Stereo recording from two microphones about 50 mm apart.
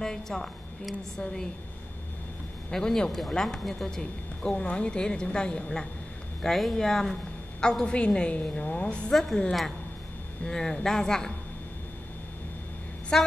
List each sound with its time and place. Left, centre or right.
0.0 s a woman's voice: centre
2.7 s a woman's voice: centre
6.4 s a woman's voice: centre
7.8 s a woman's voice: centre
9.1 s a woman's voice: centre
13.1 s a woman's voice: centre